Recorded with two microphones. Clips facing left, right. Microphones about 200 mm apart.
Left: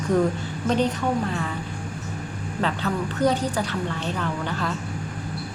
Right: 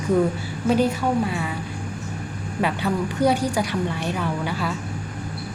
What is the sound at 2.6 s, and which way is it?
A woman's voice, 10° right (ahead or behind).